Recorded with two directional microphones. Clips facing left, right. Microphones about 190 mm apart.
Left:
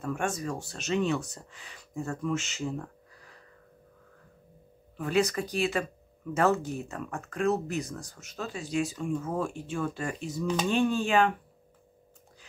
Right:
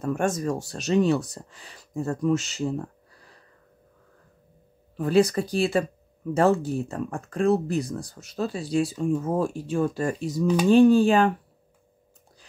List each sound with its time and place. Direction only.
0.0 s speech: 40° right (ahead or behind)
4.9 s speech: 35° right (ahead or behind)